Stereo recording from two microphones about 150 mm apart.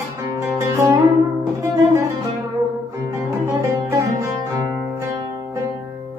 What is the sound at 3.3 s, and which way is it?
Music, 20° right (ahead or behind).